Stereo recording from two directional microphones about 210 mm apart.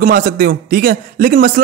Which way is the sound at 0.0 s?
45° right (ahead or behind).